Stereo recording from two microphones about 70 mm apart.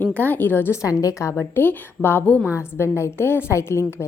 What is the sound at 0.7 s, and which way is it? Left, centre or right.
Speech, left.